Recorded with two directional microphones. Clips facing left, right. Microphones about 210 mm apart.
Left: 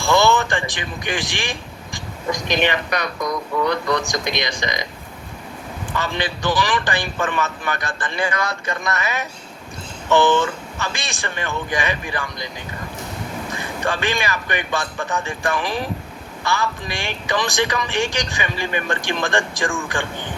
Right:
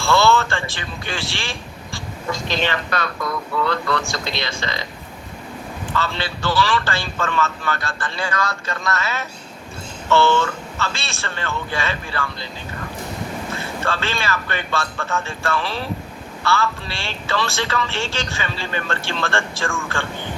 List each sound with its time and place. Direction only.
0.0 s speech: 15° left (ahead or behind)
5.9 s speech: 15° left (ahead or behind)
13.5 s speech: 15° left (ahead or behind)